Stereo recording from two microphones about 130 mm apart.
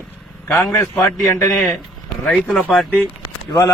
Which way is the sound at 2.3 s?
5° left (ahead or behind).